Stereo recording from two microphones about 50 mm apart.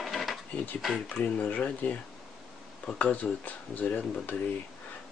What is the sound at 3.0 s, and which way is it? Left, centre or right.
Speech, left.